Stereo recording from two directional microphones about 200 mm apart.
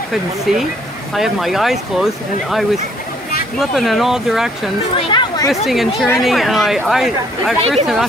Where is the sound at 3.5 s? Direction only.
Centre (ahead or behind).